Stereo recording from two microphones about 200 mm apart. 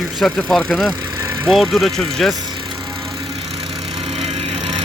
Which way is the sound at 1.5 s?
Centre (ahead or behind).